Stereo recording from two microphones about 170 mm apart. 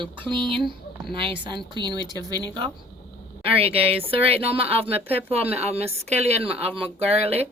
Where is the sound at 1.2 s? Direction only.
30° right (ahead or behind).